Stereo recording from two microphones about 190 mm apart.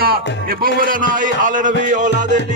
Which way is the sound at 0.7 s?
45° right (ahead or behind).